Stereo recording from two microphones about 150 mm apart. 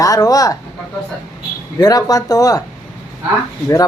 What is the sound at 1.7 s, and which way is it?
Speech, 25° left (ahead or behind).